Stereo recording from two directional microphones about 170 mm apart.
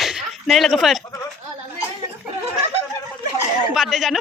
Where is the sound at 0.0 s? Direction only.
Centre (ahead or behind).